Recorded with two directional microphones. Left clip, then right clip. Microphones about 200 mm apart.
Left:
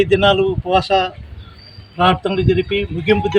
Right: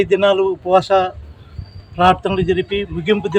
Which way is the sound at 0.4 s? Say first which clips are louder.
Right 2 dB; 15° right (ahead or behind).